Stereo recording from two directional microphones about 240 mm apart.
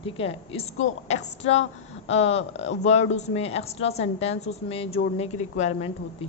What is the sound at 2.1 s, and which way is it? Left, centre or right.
A woman's voice, left.